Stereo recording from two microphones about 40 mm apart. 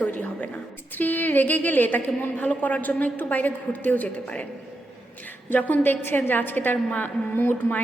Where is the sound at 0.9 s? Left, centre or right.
Left.